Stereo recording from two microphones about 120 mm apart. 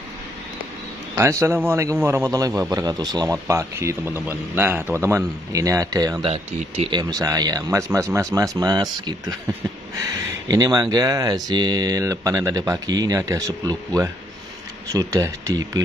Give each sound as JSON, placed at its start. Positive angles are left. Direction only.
{"t": 1.1, "sound": "a man's voice", "side_deg": -25}
{"t": 6.2, "sound": "speech", "side_deg": -55}
{"t": 6.9, "sound": "speech", "side_deg": -35}
{"t": 10.5, "sound": "a man's voice", "side_deg": -30}